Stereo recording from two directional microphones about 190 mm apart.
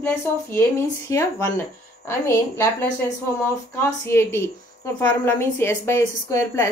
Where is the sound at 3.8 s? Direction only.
15° left (ahead or behind).